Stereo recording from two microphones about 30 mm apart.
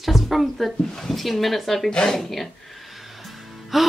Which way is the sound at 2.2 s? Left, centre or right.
Centre.